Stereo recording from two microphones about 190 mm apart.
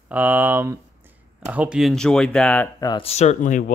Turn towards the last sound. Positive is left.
turn(degrees=40)  # may be behind; listen again after turning